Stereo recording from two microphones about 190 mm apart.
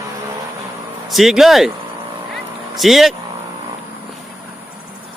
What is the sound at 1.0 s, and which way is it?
Speech, centre (ahead or behind).